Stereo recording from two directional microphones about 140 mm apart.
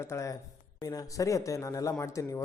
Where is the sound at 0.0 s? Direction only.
20° left (ahead or behind).